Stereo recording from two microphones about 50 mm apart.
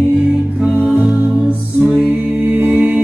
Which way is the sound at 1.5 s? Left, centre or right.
Right.